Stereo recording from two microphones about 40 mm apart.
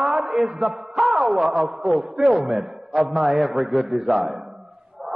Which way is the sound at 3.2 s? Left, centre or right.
Centre.